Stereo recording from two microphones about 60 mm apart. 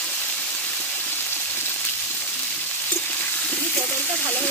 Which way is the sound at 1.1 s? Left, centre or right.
Left.